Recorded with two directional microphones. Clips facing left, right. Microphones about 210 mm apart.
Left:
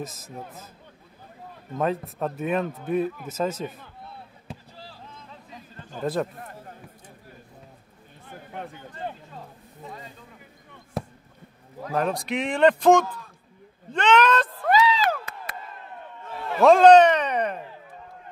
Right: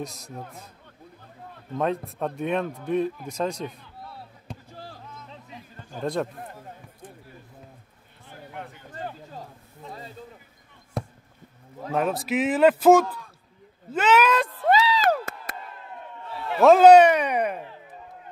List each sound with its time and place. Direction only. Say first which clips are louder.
0.0 s a man's voice: even; centre (ahead or behind)
1.8 s a man's voice: even; centre (ahead or behind)
4.5 s basketball bounce: left 1 dB; 5° left (ahead or behind)
5.9 s a man's voice: left 1 dB; 5° left (ahead or behind)
11.0 s basketball bounce: even; 5° left (ahead or behind)
11.9 s a man's voice: right 1 dB; 5° right (ahead or behind)
13.9 s a sound: even; 5° right (ahead or behind)
14.6 s a sound: even; 30° right (ahead or behind)
16.6 s a sound: right 1 dB; 5° right (ahead or behind)